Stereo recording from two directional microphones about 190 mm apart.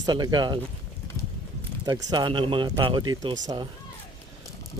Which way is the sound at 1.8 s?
20° right (ahead or behind).